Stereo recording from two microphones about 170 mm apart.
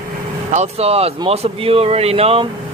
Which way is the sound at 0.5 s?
40° right (ahead or behind).